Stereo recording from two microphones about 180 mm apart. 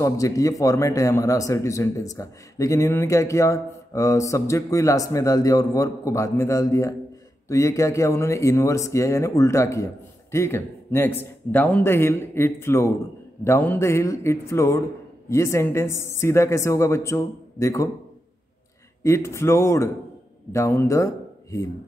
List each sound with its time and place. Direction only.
0.0 s speech: 20° left (ahead or behind)
19.0 s speech: 15° left (ahead or behind)